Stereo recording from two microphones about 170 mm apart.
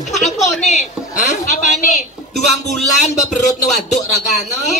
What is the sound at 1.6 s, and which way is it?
Speech, 50° left (ahead or behind).